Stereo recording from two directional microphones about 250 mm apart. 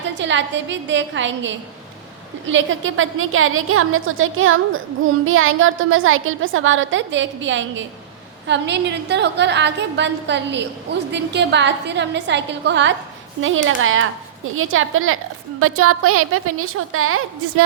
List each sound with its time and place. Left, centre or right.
0.2 s a woman's voice: right